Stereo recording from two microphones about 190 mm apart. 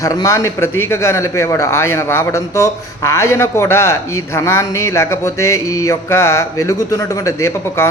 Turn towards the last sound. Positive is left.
turn(degrees=15)  # may be behind; listen again after turning